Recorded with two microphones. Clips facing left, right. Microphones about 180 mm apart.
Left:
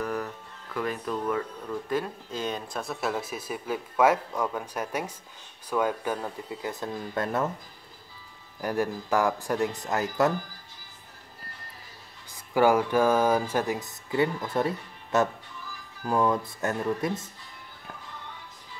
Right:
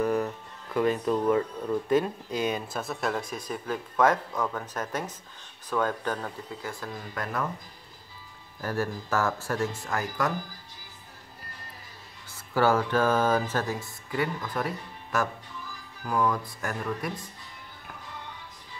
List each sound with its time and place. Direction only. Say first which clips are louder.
0.0 s music: right 5 dB; 20° right (ahead or behind)
0.7 s speech: right 5 dB; 25° right (ahead or behind); by 7.5 s 25° left (ahead or behind)
8.5 s speech: left 2 dB; 15° left (ahead or behind)
12.5 s speech: left 2 dB; 15° left (ahead or behind)